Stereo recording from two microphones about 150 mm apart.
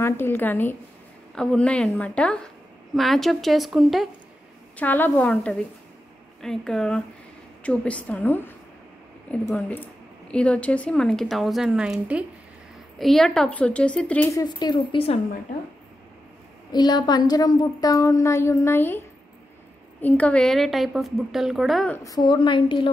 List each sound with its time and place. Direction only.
0.0 s a woman's voice: 15° left (ahead or behind); by 4.1 s centre (ahead or behind)
4.7 s a woman's voice: 10° left (ahead or behind)
14.3 s a woman's voice: 25° left (ahead or behind)
16.7 s a woman's voice: 30° left (ahead or behind); by 21.9 s centre (ahead or behind)
21.9 s a woman's voice: 25° left (ahead or behind)